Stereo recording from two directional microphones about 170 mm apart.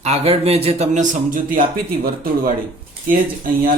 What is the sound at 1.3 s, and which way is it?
Speech, 55° right (ahead or behind).